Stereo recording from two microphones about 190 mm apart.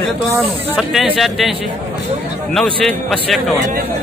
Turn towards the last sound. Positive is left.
turn(degrees=0)  # may be behind; listen again after turning